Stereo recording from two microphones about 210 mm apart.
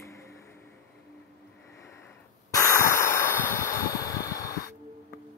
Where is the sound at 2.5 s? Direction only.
15° left (ahead or behind).